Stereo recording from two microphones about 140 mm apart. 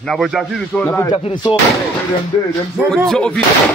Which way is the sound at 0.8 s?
15° left (ahead or behind).